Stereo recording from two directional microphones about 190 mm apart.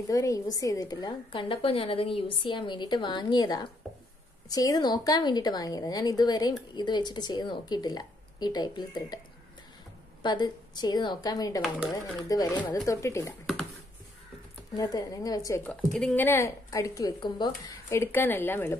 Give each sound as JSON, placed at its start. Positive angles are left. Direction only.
{"t": 0.1, "sound": "a woman's voice", "side_deg": 20}
{"t": 3.8, "sound": "a sound", "side_deg": 0}
{"t": 4.5, "sound": "a woman's voice", "side_deg": 20}
{"t": 10.2, "sound": "a woman's voice", "side_deg": 20}
{"t": 14.7, "sound": "a woman's voice", "side_deg": 20}
{"t": 15.6, "sound": "a woman's voice", "side_deg": 5}